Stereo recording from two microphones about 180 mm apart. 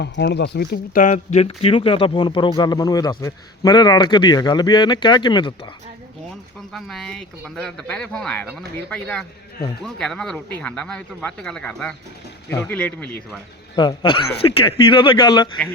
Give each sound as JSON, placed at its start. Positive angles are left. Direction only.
{"t": 0.0, "sound": "speech", "side_deg": 70}
{"t": 6.7, "sound": "speech", "side_deg": 0}
{"t": 13.7, "sound": "speech", "side_deg": 25}